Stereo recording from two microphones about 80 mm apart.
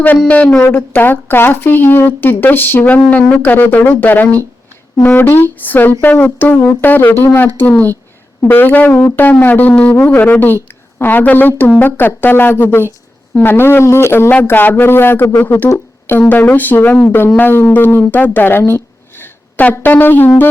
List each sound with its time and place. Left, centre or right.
0.3 s speech: centre
19.2 s a sound: left
19.7 s speech: left